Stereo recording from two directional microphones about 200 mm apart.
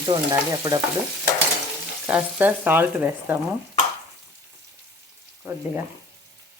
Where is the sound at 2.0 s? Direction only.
10° right (ahead or behind).